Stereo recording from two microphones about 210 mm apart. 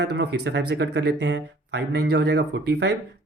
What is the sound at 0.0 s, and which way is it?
Speech, 55° right (ahead or behind).